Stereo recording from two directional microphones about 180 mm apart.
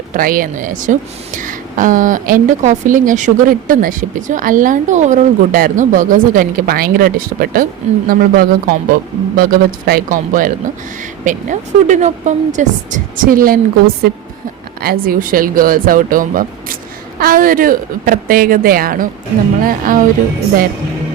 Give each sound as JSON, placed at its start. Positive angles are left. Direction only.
{"t": 0.1, "sound": "a woman's voice", "side_deg": -50}